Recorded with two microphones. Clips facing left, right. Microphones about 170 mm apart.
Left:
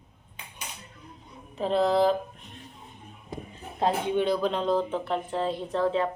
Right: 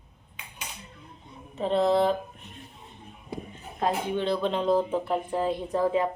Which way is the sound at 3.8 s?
25° left (ahead or behind).